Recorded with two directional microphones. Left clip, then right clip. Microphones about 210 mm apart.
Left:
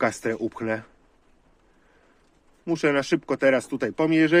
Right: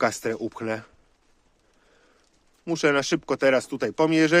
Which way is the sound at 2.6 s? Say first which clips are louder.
Right 1 dB; 20° right (ahead or behind).